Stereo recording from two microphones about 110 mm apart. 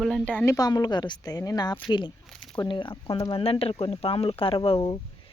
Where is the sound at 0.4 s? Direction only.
35° left (ahead or behind).